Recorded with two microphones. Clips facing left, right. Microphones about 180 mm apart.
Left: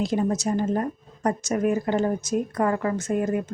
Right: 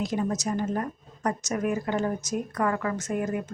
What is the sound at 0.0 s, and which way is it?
A woman's voice, 30° left (ahead or behind).